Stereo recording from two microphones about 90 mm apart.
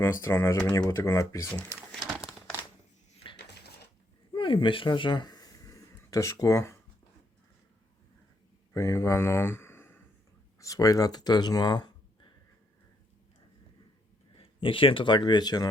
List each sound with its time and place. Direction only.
0.0 s speech: 30° left (ahead or behind)
0.5 s speech: 45° left (ahead or behind)
0.9 s speech: 30° left (ahead or behind)
4.4 s speech: 65° left (ahead or behind)
4.9 s a sound: 60° left (ahead or behind); by 6.7 s 30° left (ahead or behind)
8.7 s speech: 35° left (ahead or behind)
10.6 s speech: 40° left (ahead or behind)
14.3 s a man's voice: 85° left; by 15.7 s 50° left (ahead or behind)